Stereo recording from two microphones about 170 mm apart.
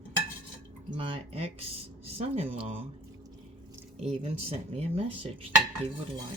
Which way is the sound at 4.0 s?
40° right (ahead or behind).